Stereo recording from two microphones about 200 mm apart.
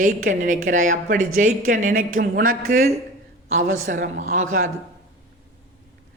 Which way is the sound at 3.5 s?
90° right.